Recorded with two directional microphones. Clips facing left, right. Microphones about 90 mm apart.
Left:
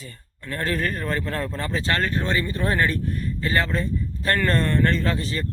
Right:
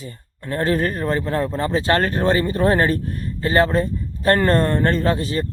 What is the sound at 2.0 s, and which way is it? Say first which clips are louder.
Speech: right 6 dB; 45° right (ahead or behind).